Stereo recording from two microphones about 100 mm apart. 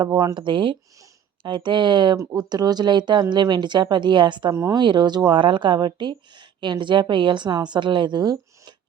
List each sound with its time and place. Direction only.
0.0 s speech: 35° right (ahead or behind)
0.3 s speech: 55° right (ahead or behind)